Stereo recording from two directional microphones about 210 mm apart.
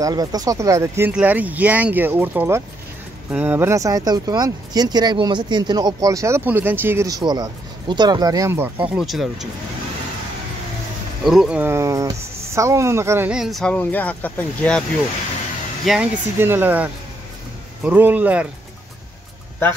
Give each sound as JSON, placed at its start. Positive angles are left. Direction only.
{"t": 0.0, "sound": "speech", "side_deg": -20}
{"t": 8.9, "sound": "speech", "side_deg": 0}
{"t": 11.2, "sound": "speech", "side_deg": -5}
{"t": 15.8, "sound": "speech", "side_deg": -5}